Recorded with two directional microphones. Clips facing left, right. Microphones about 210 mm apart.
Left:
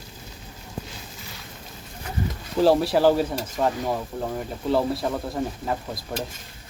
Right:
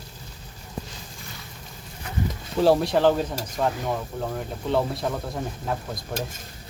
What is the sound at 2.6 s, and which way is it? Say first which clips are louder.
Speech: left 1 dB; centre (ahead or behind).